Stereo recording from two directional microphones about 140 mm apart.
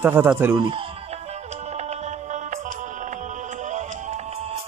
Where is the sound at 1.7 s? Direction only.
55° right (ahead or behind).